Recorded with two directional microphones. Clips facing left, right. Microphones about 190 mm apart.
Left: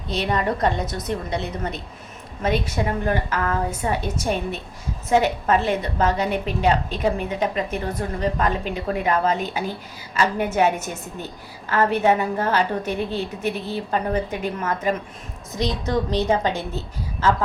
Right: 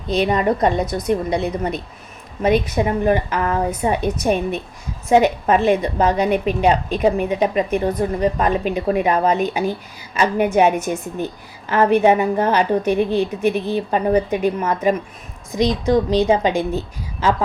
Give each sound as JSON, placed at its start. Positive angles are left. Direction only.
{"t": 0.1, "sound": "a woman's voice", "side_deg": -15}